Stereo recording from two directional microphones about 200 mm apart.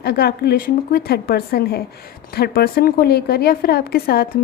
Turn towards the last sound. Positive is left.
turn(degrees=50)  # may be behind; listen again after turning